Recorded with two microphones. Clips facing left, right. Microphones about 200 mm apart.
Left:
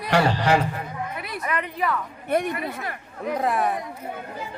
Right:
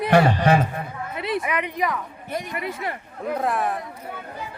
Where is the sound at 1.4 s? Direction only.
10° right (ahead or behind).